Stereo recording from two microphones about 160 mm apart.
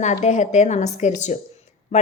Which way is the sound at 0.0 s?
45° left (ahead or behind).